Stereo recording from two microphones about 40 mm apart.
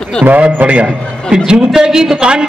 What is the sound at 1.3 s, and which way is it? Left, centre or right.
A man's voice, right.